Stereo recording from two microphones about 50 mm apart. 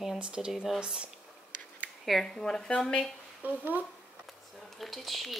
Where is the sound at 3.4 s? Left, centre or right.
Right.